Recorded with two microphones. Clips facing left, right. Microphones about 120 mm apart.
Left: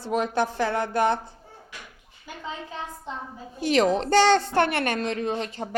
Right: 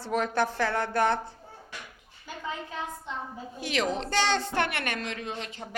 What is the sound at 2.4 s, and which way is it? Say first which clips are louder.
A woman's voice: even; 30° left (ahead or behind).